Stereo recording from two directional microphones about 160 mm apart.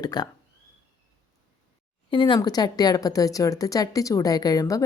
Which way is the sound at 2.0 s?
30° left (ahead or behind).